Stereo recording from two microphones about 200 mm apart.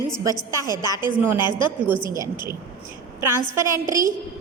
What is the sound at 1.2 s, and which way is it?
Speech, 10° right (ahead or behind).